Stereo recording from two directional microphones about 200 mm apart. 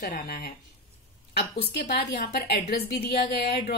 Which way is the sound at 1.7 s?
55° left (ahead or behind).